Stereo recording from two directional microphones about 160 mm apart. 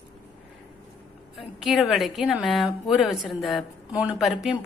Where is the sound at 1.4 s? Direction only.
Centre (ahead or behind).